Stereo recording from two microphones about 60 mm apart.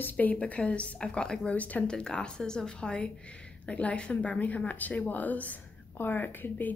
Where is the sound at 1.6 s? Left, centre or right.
Left.